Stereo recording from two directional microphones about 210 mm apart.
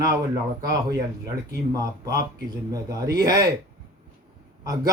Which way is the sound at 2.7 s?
15° right (ahead or behind).